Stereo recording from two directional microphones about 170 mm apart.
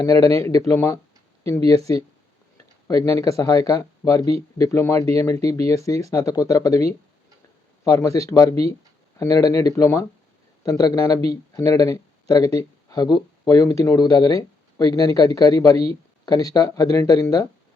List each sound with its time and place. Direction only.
0.3 s a man's voice: 20° left (ahead or behind)
7.9 s a man's voice: 20° left (ahead or behind)